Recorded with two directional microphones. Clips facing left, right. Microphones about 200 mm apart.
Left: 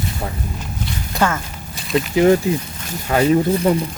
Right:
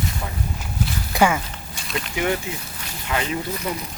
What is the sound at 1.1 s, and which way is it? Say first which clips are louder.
Speech: right 1 dB; 10° right (ahead or behind).